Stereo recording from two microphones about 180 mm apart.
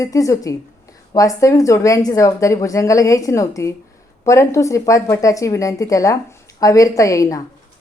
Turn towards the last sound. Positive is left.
turn(degrees=20)  # may be behind; listen again after turning